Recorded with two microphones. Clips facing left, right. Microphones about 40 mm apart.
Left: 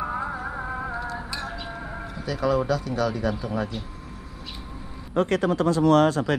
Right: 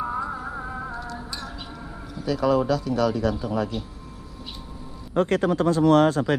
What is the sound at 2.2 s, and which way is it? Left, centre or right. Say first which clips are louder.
Speech: right 2 dB; left.